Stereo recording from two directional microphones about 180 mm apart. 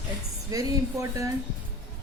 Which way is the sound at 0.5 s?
20° right (ahead or behind).